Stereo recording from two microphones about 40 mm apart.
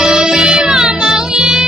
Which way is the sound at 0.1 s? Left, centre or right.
Centre.